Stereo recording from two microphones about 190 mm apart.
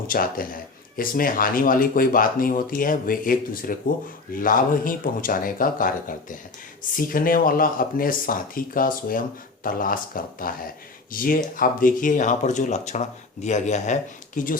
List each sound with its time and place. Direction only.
0.1 s speech: 50° left (ahead or behind)